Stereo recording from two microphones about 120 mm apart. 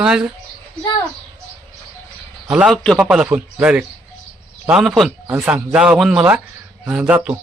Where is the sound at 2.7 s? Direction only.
5° left (ahead or behind).